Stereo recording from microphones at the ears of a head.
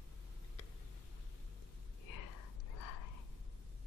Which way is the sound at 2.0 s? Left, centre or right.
Left.